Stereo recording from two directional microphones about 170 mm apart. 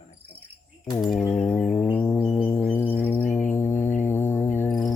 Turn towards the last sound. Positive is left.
turn(degrees=15)  # may be behind; listen again after turning